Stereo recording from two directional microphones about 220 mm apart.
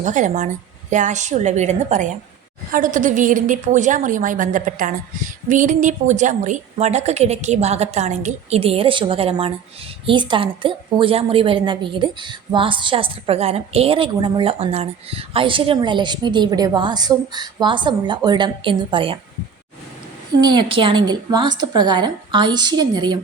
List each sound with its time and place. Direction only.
0.0 s a woman's voice: 35° right (ahead or behind)
20.4 s a woman's voice: 20° right (ahead or behind)